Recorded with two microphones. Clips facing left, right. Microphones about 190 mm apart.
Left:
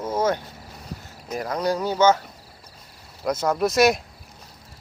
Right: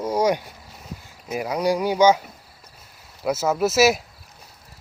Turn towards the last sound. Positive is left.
turn(degrees=-5)  # may be behind; listen again after turning